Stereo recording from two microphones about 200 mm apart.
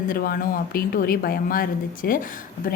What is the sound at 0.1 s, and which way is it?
A woman's voice, 45° left (ahead or behind).